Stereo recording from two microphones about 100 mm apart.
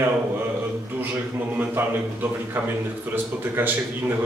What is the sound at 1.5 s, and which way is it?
Speech, 20° right (ahead or behind).